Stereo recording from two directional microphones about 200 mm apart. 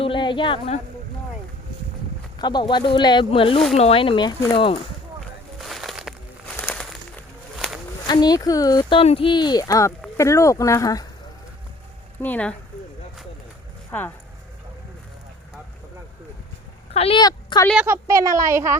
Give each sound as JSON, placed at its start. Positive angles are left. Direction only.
{"t": 0.0, "sound": "a woman's voice", "side_deg": 25}
{"t": 2.4, "sound": "speech", "side_deg": 20}
{"t": 5.5, "sound": "a sound", "side_deg": 0}
{"t": 8.0, "sound": "speech", "side_deg": 20}
{"t": 12.2, "sound": "speech", "side_deg": 5}
{"t": 13.9, "sound": "speech", "side_deg": 10}
{"t": 16.9, "sound": "a woman's voice", "side_deg": 30}
{"t": 17.7, "sound": "speech", "side_deg": -5}